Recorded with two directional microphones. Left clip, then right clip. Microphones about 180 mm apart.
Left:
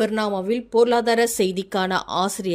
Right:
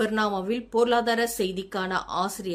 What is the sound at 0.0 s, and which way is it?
Speech, 30° left (ahead or behind).